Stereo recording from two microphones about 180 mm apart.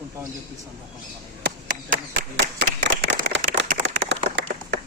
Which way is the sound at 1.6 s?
65° right (ahead or behind).